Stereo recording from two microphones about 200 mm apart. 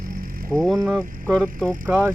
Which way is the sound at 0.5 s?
Centre (ahead or behind).